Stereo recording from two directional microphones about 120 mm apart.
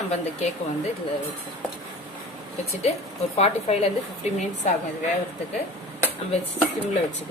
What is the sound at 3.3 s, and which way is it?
Speech, 60° left (ahead or behind).